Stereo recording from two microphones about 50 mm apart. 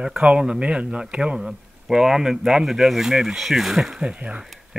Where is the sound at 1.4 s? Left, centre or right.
Centre.